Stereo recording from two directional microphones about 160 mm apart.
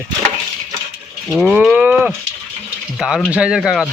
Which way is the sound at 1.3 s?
5° right (ahead or behind).